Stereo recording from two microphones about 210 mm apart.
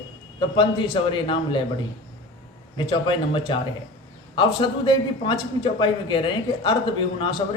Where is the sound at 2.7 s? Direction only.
25° left (ahead or behind).